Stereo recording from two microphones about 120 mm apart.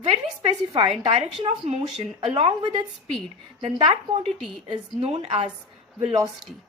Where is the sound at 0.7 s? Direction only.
40° right (ahead or behind).